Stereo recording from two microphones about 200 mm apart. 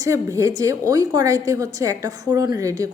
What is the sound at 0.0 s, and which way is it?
A woman's voice, 15° right (ahead or behind).